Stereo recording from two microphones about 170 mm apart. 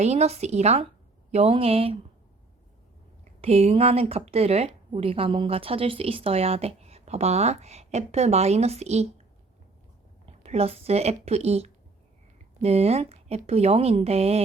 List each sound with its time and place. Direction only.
0.0 s speech: 40° right (ahead or behind)
3.4 s speech: 35° right (ahead or behind)
10.4 s speech: 35° right (ahead or behind)